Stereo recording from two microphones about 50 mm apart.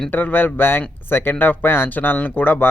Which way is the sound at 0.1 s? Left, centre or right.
Left.